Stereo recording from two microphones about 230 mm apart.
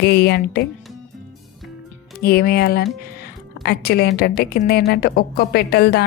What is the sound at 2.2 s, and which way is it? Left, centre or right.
Speech, left.